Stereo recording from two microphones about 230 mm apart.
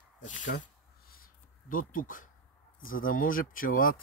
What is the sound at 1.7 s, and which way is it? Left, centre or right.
Speech, left.